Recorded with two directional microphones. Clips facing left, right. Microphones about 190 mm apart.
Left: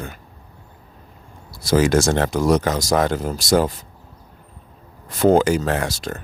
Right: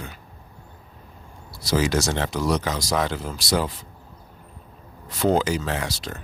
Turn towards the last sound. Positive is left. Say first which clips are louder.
# left 5 dB
turn(degrees=50)  # may be behind; listen again after turning